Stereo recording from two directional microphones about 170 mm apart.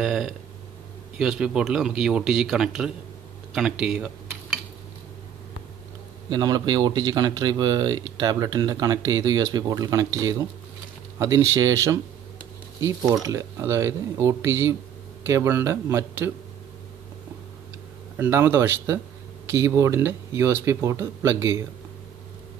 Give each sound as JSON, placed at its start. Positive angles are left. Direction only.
{"t": 0.0, "sound": "speech", "side_deg": -5}
{"t": 6.3, "sound": "speech", "side_deg": -25}
{"t": 18.1, "sound": "speech", "side_deg": -15}